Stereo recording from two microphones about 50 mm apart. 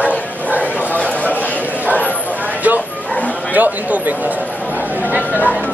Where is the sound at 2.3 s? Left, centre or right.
Right.